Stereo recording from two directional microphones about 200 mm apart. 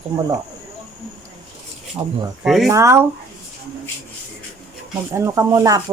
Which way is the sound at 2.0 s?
20° right (ahead or behind).